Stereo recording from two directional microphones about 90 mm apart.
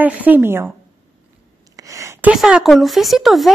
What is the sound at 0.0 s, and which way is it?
Speech, 20° right (ahead or behind).